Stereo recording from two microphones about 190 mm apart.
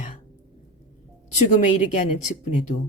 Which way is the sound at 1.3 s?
40° left (ahead or behind).